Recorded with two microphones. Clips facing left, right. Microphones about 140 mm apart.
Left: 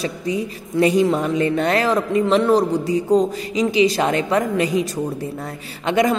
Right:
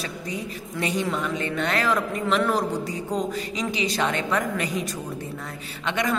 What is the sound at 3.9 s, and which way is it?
A woman's voice, 35° left (ahead or behind).